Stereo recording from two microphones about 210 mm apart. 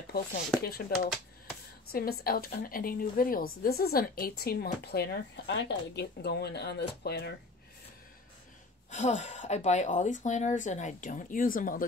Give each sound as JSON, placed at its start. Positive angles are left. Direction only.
{"t": 0.6, "sound": "speech", "side_deg": 45}
{"t": 8.9, "sound": "speech", "side_deg": 35}